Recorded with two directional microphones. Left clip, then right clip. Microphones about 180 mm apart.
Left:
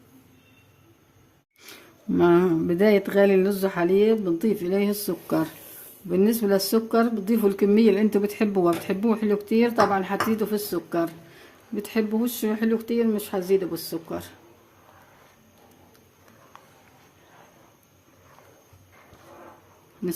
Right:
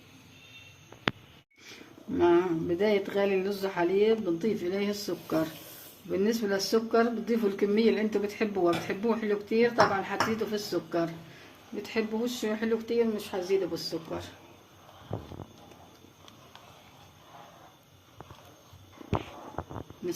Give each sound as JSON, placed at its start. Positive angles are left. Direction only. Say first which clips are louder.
{"t": 1.6, "sound": "speech", "louder": "left 7 dB", "side_deg": 90}